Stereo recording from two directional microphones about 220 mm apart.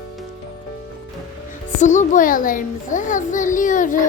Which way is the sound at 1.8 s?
35° left (ahead or behind).